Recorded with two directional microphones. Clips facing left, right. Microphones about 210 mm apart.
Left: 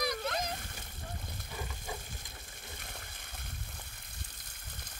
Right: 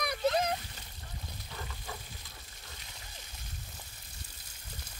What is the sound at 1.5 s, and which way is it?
Frying, 10° left (ahead or behind).